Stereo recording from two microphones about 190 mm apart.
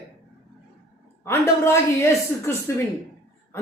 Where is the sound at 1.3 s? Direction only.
15° left (ahead or behind).